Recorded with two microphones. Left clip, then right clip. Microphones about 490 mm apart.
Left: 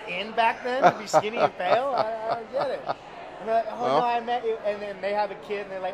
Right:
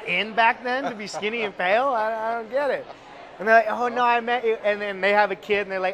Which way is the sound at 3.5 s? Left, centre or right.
Right.